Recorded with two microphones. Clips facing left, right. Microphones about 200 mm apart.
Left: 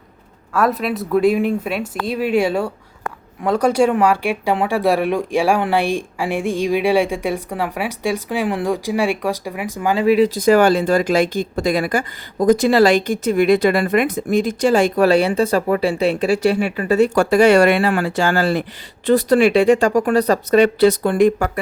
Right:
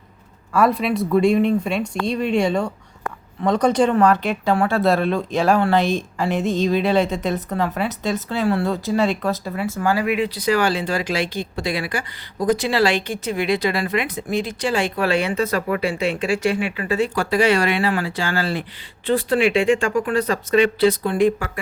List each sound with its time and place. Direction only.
0.5 s speech: centre (ahead or behind); by 10.1 s 20° left (ahead or behind)
10.1 s speech: 40° left (ahead or behind)